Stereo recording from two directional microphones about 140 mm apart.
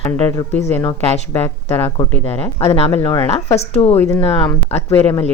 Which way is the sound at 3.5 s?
50° left (ahead or behind).